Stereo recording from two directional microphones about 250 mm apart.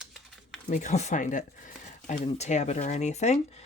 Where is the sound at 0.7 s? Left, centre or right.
Left.